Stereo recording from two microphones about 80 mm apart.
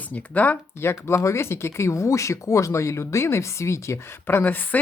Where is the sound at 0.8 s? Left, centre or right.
Left.